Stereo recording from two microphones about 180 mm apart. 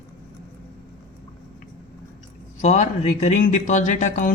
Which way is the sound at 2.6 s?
40° left (ahead or behind).